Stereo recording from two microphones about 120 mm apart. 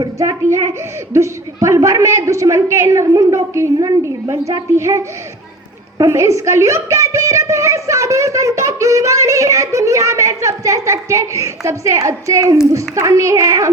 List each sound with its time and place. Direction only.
0.2 s a woman's voice: 25° right (ahead or behind)